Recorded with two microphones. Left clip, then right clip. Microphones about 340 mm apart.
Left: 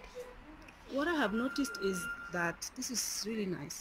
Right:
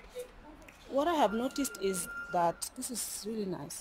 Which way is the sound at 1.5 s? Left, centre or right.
Right.